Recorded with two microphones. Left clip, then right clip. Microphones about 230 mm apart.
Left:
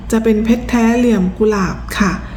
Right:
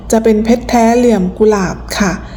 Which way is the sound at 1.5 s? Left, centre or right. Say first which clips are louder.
Right 4 dB; left.